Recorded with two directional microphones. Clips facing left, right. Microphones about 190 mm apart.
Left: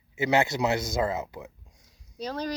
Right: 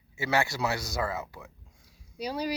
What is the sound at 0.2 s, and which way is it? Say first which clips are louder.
Speech: left 4 dB; 20° left (ahead or behind).